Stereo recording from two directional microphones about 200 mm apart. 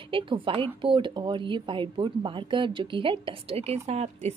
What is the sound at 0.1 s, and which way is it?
Speech, 25° right (ahead or behind).